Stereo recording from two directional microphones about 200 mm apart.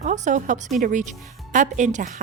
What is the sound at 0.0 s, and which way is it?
A woman's voice, 40° right (ahead or behind).